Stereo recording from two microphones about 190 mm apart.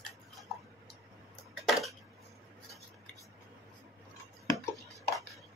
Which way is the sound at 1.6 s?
Centre (ahead or behind).